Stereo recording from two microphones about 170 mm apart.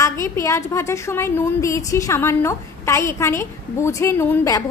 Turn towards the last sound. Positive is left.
turn(degrees=15)  # may be behind; listen again after turning